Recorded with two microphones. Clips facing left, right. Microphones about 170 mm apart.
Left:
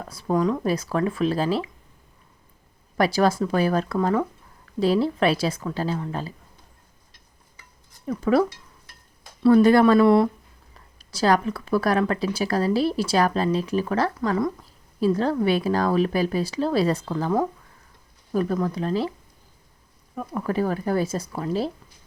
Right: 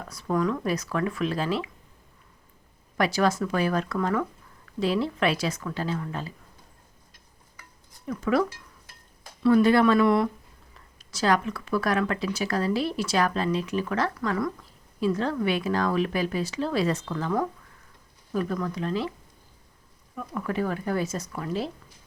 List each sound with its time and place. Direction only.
0.1 s speech: 30° left (ahead or behind)
3.0 s speech: 35° left (ahead or behind)
8.1 s speech: 30° left (ahead or behind)
15.0 s speech: 35° left (ahead or behind)
20.1 s speech: 35° left (ahead or behind)